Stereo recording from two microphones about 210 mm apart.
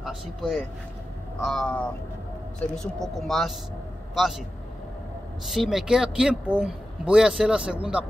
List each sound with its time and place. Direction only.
0.0 s speech: centre (ahead or behind)
3.2 s a man's voice: centre (ahead or behind)
5.5 s speech: centre (ahead or behind)